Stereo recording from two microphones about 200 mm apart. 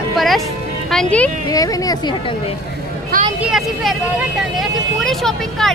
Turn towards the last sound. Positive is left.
turn(degrees=0)  # may be behind; listen again after turning